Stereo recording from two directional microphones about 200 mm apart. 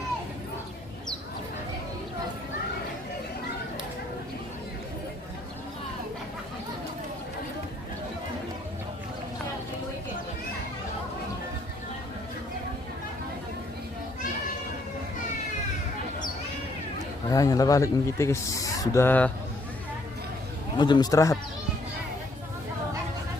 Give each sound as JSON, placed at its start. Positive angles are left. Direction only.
{"t": 17.2, "sound": "a man's voice", "side_deg": 15}
{"t": 20.7, "sound": "a man's voice", "side_deg": 20}